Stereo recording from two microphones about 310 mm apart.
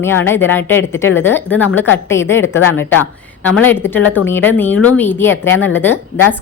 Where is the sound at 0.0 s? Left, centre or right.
Centre.